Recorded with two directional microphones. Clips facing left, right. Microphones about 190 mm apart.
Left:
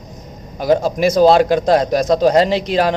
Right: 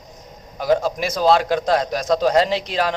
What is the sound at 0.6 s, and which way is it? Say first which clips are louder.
A man's voice: left 5 dB; 40° left (ahead or behind).